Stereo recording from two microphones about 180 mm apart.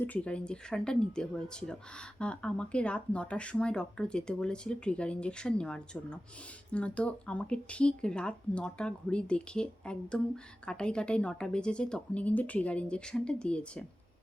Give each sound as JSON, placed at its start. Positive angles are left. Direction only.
{"t": 0.0, "sound": "speech", "side_deg": 5}